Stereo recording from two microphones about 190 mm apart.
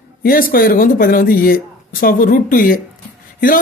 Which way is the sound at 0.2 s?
50° left (ahead or behind).